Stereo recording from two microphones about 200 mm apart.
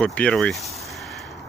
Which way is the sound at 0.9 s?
Centre (ahead or behind).